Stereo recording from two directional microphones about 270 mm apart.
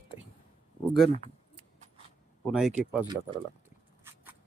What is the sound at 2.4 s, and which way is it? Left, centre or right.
Speech, centre.